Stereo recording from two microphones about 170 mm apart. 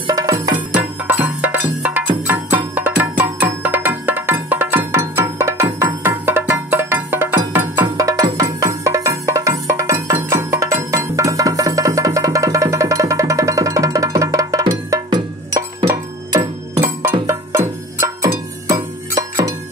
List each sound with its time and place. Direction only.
0.0 s music: 20° right (ahead or behind)
0.7 s music: 10° right (ahead or behind)